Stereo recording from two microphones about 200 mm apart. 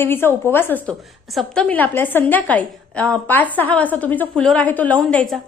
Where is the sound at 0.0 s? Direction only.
10° left (ahead or behind).